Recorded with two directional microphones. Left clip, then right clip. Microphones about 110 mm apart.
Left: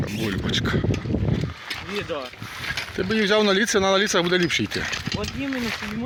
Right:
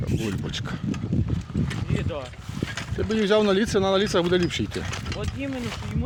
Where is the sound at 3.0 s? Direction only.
10° right (ahead or behind).